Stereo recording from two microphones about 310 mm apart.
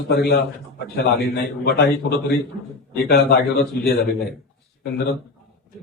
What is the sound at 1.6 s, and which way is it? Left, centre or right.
A man's voice, left.